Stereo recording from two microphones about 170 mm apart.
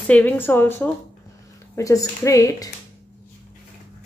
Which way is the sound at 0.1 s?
10° left (ahead or behind).